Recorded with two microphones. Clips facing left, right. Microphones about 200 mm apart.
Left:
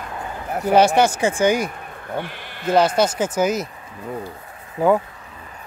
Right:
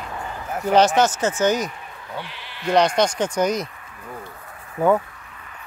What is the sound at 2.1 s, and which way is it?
Speech, 50° left (ahead or behind).